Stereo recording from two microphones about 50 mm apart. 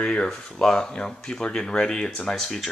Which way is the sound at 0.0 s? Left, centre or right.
Centre.